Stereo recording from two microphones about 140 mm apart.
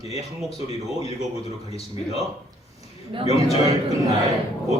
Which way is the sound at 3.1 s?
35° right (ahead or behind).